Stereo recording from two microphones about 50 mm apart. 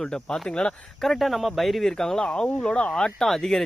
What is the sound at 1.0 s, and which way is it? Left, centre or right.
Speech, centre.